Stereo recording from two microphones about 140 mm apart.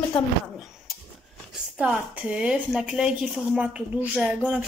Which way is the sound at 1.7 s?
10° right (ahead or behind).